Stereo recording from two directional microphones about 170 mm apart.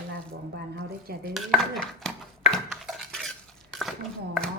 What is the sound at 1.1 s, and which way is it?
Dishes, 65° right (ahead or behind).